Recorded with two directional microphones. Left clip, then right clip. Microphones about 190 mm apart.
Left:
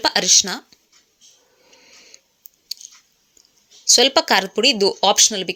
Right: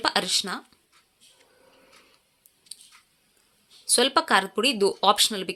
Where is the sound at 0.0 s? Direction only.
15° left (ahead or behind).